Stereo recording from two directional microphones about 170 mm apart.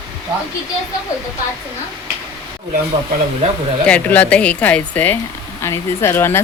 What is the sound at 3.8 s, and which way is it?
Speech, 10° left (ahead or behind).